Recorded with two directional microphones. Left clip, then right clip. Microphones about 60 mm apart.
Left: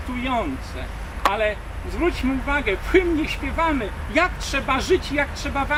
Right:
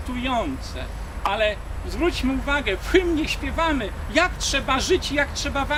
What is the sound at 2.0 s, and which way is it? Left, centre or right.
Speech, right.